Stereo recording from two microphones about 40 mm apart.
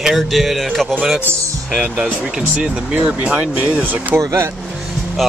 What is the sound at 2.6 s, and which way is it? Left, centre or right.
Speech, right.